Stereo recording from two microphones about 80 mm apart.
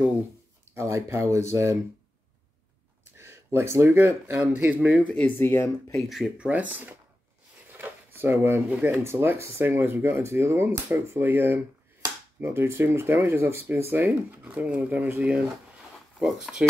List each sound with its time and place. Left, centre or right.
0.7 s speech: right
3.5 s speech: right
4.4 s speech: centre
5.0 s speech: left
6.0 s speech: centre
6.3 s speech: centre
7.7 s a sound: right
8.8 s speech: right
16.2 s speech: centre